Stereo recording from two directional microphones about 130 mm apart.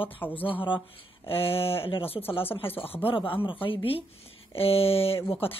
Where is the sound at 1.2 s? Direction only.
45° left (ahead or behind).